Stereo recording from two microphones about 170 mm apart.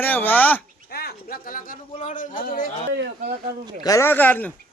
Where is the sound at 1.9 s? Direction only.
45° left (ahead or behind).